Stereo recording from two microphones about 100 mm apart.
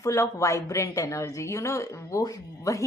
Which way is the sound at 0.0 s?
35° left (ahead or behind).